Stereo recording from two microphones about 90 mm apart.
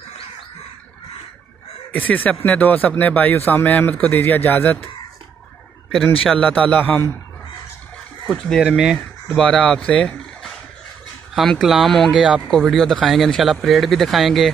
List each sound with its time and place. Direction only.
1.9 s speech: 20° left (ahead or behind)
6.3 s a man's voice: 15° left (ahead or behind)
8.3 s speech: centre (ahead or behind)